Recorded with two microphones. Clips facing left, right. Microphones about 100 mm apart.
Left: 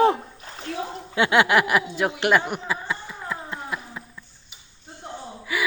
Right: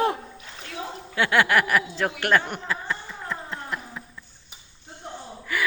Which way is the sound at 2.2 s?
10° left (ahead or behind).